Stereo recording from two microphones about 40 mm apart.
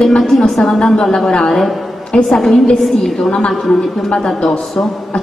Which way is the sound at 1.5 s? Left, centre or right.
Centre.